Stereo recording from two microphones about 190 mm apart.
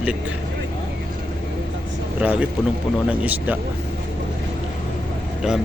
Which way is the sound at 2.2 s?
5° right (ahead or behind).